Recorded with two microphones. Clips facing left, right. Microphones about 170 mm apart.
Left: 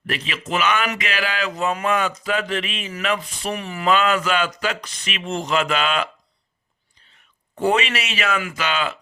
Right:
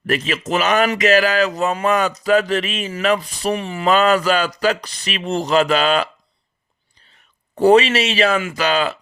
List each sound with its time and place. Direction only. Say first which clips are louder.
0.1 s a man's voice: right 6 dB; 45° right (ahead or behind)
7.5 s a man's voice: right 8 dB; 35° right (ahead or behind)